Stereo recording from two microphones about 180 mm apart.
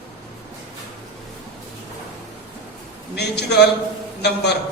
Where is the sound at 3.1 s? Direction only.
65° left (ahead or behind).